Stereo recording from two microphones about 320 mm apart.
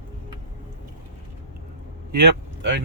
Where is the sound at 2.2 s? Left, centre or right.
Right.